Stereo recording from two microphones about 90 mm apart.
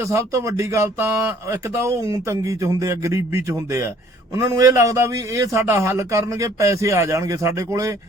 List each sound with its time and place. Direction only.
0.0 s speech: 35° right (ahead or behind)